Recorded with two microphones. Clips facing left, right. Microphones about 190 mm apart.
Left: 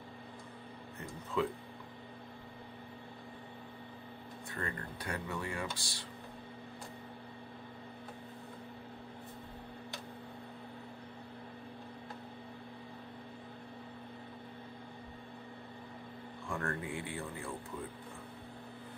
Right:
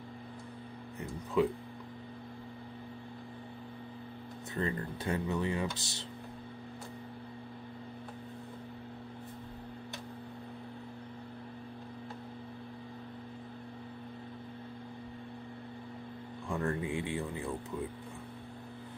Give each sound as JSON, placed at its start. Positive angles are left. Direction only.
{"t": 1.4, "sound": "speech", "side_deg": -15}
{"t": 4.6, "sound": "speech", "side_deg": -25}
{"t": 16.4, "sound": "music", "side_deg": -15}